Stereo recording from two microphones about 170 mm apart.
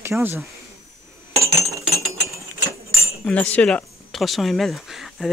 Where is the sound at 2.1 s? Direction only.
20° right (ahead or behind).